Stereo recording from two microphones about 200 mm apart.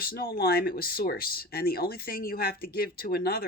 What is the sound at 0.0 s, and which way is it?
Speech, 50° left (ahead or behind).